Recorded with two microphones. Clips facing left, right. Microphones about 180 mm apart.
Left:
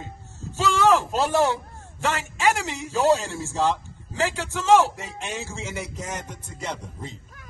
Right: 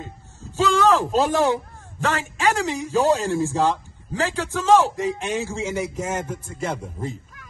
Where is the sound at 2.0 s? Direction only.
15° left (ahead or behind).